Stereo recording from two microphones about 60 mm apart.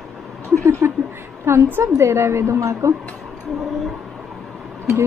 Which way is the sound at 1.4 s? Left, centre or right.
Right.